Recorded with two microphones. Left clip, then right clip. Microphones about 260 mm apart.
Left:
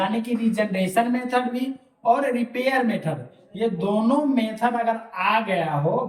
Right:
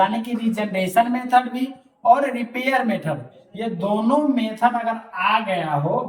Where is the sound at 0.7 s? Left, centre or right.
Centre.